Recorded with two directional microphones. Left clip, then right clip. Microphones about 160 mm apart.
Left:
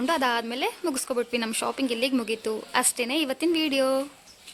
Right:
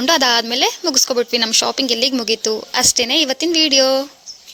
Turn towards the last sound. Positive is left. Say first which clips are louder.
# right 10 dB
turn(degrees=-25)  # may be behind; listen again after turning